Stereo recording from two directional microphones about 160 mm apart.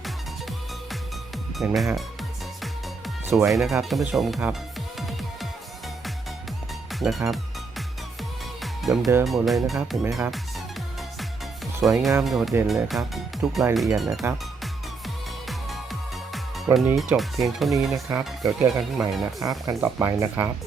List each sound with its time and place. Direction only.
1.5 s speech: centre (ahead or behind)
3.2 s speech: centre (ahead or behind)
4.9 s music: centre (ahead or behind)
7.0 s speech: centre (ahead or behind)
8.6 s music: centre (ahead or behind)
9.2 s speech: centre (ahead or behind)
11.8 s speech: centre (ahead or behind)
15.4 s music: centre (ahead or behind)
16.7 s speech: centre (ahead or behind)
19.4 s speech: 20° right (ahead or behind)